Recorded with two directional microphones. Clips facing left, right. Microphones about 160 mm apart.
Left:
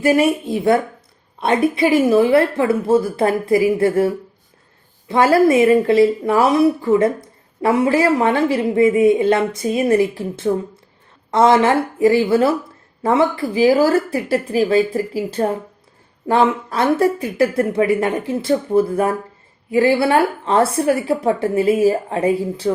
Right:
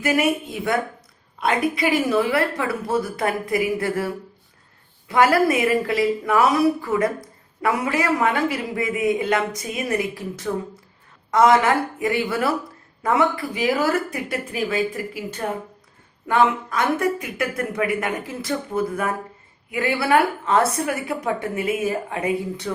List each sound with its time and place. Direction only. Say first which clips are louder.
0.0 s a woman's voice: left 6 dB; 30° left (ahead or behind)